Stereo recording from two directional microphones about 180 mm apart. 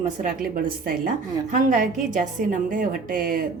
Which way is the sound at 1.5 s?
45° right (ahead or behind).